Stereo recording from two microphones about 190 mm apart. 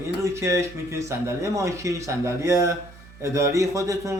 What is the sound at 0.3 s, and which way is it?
Speech, 15° right (ahead or behind).